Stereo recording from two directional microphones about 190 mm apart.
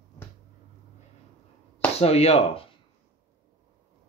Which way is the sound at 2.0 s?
35° left (ahead or behind).